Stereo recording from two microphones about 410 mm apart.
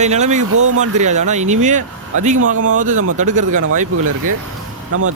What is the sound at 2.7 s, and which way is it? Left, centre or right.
Speech, centre.